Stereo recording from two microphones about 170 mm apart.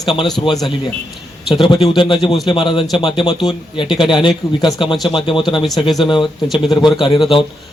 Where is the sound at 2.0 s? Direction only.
30° left (ahead or behind).